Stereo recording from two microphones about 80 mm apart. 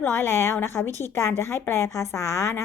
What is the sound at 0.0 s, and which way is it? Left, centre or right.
A woman's voice, left.